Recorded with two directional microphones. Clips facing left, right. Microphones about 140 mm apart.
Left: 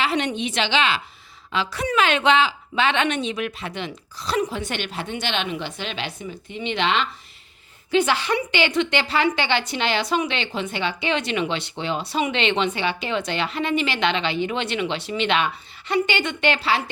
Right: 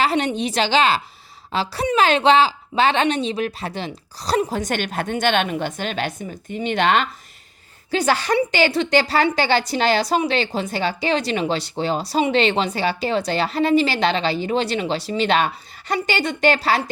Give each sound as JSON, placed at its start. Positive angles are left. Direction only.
{"t": 0.0, "sound": "a woman's voice", "side_deg": -40}